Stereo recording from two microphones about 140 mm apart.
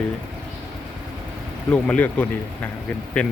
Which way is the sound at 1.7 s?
10° left (ahead or behind).